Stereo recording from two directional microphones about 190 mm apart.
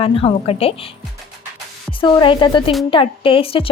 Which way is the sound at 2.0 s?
25° left (ahead or behind).